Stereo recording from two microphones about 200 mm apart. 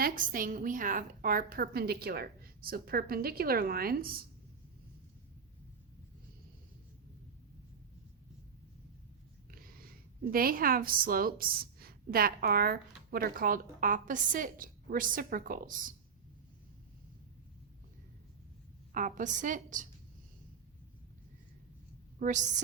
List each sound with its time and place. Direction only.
0.0 s a woman's voice: 45° right (ahead or behind)
9.5 s a woman's voice: 45° right (ahead or behind)
18.9 s a woman's voice: 40° right (ahead or behind)
22.2 s a woman's voice: 40° right (ahead or behind)